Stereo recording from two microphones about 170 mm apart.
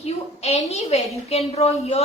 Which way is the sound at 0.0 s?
40° left (ahead or behind).